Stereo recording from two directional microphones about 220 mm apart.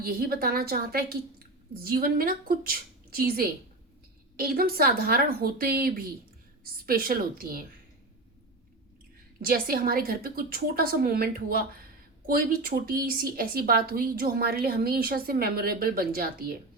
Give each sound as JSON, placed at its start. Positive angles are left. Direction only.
{"t": 0.0, "sound": "a woman's voice", "side_deg": -45}
{"t": 9.4, "sound": "a woman's voice", "side_deg": -40}